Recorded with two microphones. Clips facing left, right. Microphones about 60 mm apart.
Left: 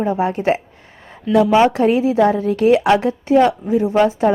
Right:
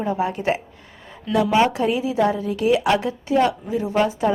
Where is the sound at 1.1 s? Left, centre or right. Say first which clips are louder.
Left 6 dB; left.